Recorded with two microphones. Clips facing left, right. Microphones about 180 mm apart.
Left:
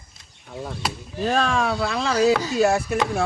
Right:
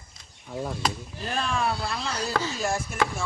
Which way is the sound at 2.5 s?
70° left (ahead or behind).